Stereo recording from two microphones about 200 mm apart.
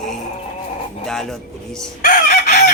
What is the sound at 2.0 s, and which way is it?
Chicken, 40° left (ahead or behind).